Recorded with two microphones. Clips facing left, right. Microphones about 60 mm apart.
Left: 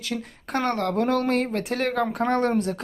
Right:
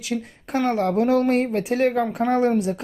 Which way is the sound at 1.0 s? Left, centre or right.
Centre.